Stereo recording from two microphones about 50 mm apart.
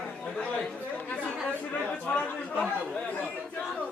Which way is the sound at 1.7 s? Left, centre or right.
Left.